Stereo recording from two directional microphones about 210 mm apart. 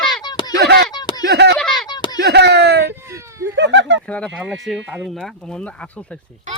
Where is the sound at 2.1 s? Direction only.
55° right (ahead or behind).